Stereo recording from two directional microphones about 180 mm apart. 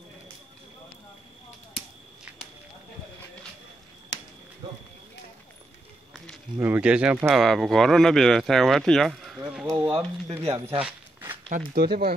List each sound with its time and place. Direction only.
4.6 s run: 30° right (ahead or behind)
6.6 s speech: 10° right (ahead or behind)
9.7 s speech: 20° right (ahead or behind)
10.8 s walk: 10° right (ahead or behind)
11.7 s speech: 60° right (ahead or behind)